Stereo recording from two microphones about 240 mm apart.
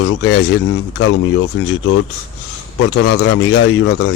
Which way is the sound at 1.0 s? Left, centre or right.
Left.